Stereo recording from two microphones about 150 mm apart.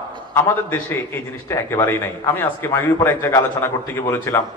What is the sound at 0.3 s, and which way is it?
A man's voice, 15° left (ahead or behind).